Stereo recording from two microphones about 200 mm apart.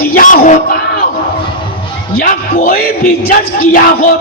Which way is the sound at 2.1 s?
45° left (ahead or behind).